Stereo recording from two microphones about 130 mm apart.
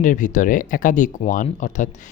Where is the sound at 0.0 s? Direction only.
85° left.